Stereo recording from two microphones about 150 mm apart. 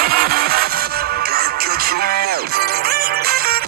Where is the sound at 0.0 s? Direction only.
90° right.